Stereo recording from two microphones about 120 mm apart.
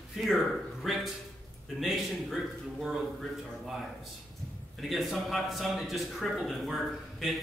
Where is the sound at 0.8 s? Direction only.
Centre (ahead or behind).